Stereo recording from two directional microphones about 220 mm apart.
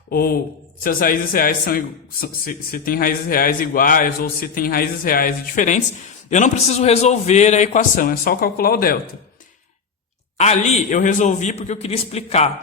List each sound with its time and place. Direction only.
0.1 s a man's voice: 45° left (ahead or behind)
10.3 s a man's voice: 30° left (ahead or behind)